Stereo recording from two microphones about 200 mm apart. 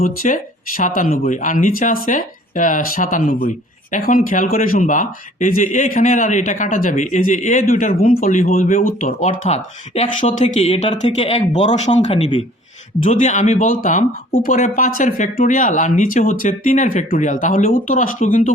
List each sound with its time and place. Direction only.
0.0 s a man's voice: 45° left (ahead or behind)